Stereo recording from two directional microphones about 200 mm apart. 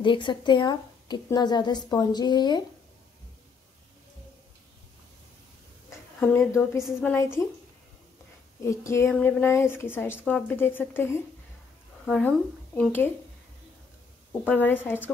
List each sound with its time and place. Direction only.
0.0 s a woman's voice: 25° left (ahead or behind)
5.9 s a woman's voice: 10° left (ahead or behind)
8.6 s a woman's voice: 15° left (ahead or behind)
14.4 s a woman's voice: 10° left (ahead or behind)